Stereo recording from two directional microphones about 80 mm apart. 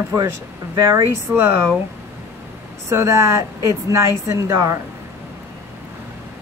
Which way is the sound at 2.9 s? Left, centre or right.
Right.